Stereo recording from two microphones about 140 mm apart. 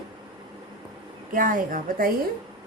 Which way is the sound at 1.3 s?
75° right (ahead or behind).